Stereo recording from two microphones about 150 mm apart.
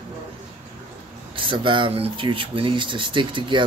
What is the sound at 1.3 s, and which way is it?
Speech, 35° right (ahead or behind).